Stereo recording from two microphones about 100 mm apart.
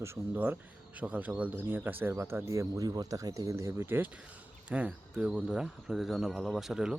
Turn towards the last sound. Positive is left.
turn(degrees=-5)  # may be behind; listen again after turning